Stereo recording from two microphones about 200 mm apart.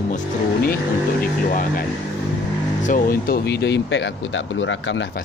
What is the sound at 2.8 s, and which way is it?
Speech, 45° left (ahead or behind).